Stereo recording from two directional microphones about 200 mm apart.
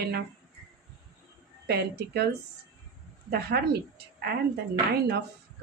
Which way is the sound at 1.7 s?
55° right (ahead or behind).